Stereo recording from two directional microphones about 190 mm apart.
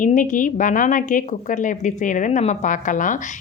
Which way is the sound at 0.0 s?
45° left (ahead or behind).